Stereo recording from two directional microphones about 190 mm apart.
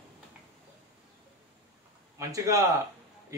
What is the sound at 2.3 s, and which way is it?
Speech, 15° right (ahead or behind).